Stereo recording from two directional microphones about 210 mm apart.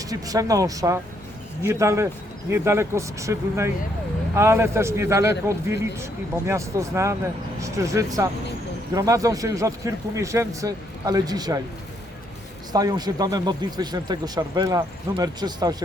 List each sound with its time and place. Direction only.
0.0 s speech: 15° right (ahead or behind)
12.7 s speech: 20° right (ahead or behind)